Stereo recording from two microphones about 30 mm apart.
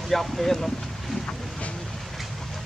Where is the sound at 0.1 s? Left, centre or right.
Centre.